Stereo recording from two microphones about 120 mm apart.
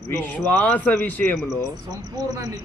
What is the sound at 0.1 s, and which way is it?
A man's voice, 20° left (ahead or behind).